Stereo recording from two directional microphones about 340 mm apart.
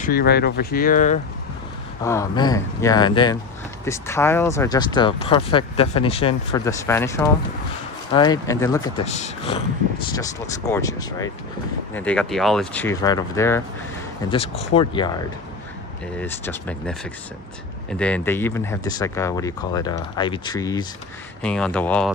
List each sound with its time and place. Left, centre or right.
0.0 s speech: left
2.0 s speech: centre